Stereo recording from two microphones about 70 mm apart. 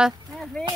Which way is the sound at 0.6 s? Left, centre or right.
Centre.